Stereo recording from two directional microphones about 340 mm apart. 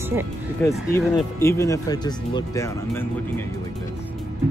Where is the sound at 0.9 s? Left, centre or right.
Centre.